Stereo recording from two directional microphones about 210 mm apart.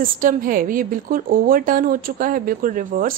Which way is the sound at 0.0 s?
40° right (ahead or behind).